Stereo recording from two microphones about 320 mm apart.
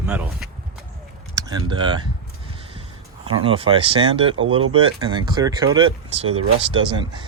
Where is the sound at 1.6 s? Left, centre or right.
Centre.